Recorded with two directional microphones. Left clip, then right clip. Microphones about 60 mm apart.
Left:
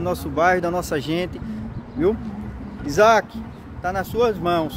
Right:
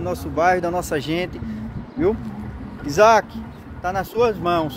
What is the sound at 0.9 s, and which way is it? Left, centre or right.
Speech, left.